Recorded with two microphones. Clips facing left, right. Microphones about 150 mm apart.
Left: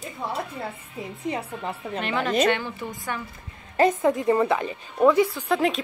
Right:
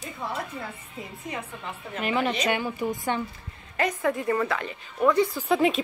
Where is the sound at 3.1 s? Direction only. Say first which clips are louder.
Right 4 dB; 25° right (ahead or behind).